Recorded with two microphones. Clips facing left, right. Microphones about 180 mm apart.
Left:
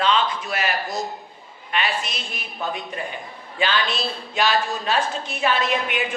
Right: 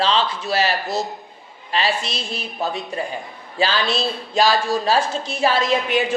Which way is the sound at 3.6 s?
35° right (ahead or behind).